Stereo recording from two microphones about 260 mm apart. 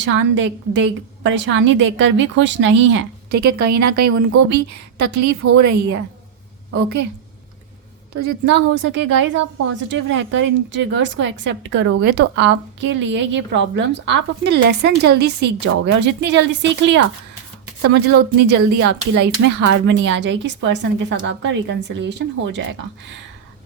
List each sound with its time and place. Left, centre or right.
0.0 s a woman's voice: right
3.4 s a woman's voice: right
4.1 s a woman's voice: right
5.4 s a woman's voice: right
6.7 s a woman's voice: right
8.2 s a woman's voice: right
18.4 s a woman's voice: right